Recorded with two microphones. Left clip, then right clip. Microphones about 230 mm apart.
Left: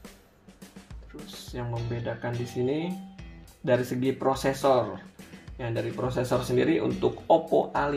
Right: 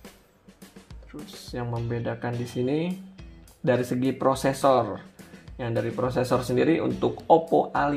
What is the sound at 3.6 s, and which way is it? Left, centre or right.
Speech, right.